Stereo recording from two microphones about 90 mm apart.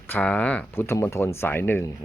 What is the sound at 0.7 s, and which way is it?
Speech, 25° left (ahead or behind).